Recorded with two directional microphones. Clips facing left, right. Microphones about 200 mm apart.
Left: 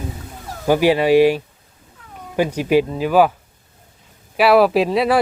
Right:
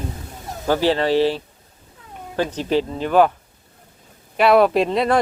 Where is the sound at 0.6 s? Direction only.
10° left (ahead or behind).